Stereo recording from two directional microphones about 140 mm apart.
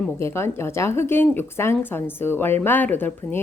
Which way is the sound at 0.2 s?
20° left (ahead or behind).